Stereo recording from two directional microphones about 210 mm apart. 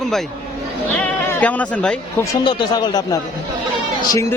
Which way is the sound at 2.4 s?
20° left (ahead or behind).